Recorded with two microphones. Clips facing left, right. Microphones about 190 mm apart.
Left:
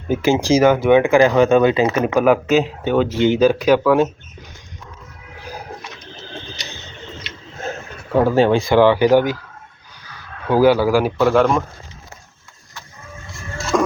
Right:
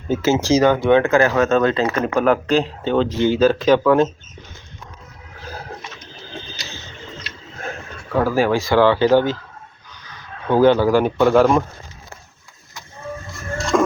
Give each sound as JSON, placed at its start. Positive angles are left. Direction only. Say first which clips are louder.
{"t": 0.1, "sound": "speech", "louder": "left 1 dB", "side_deg": 15}
{"t": 5.5, "sound": "a sound", "louder": "left 1 dB", "side_deg": 15}
{"t": 7.6, "sound": "speech", "louder": "left 3 dB", "side_deg": 25}
{"t": 10.5, "sound": "speech", "louder": "even", "side_deg": 10}
{"t": 13.6, "sound": "music", "louder": "right 1 dB", "side_deg": 0}